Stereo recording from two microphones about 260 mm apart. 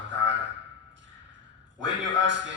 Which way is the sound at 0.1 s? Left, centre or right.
Right.